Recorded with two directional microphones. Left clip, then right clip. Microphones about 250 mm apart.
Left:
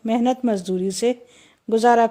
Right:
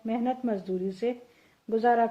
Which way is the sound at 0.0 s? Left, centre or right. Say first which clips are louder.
Left 9 dB; left.